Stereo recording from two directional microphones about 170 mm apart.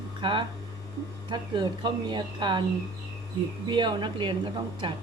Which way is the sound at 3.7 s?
25° right (ahead or behind).